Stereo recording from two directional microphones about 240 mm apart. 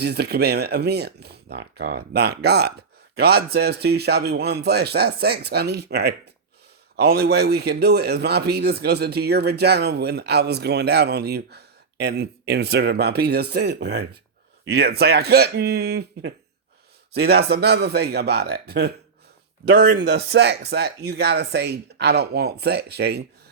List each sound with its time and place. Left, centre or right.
0.0 s a man's voice: right